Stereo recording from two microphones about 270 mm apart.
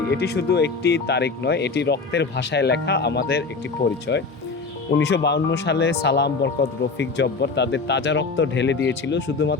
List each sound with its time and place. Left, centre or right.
0.1 s speech: left